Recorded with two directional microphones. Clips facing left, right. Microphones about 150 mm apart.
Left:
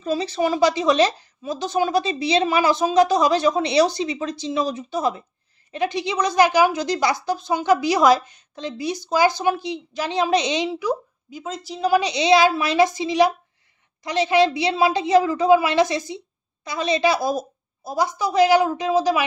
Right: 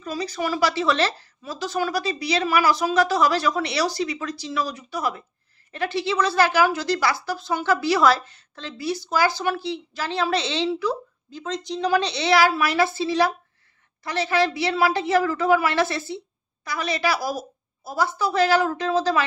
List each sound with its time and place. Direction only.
0.0 s a woman's voice: 25° left (ahead or behind)